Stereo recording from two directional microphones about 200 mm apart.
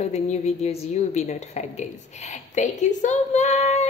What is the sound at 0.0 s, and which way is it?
A woman's voice, 35° left (ahead or behind).